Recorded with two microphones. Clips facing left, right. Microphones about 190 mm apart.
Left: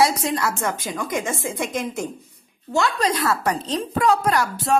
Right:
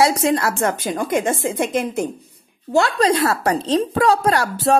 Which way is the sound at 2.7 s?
35° right (ahead or behind).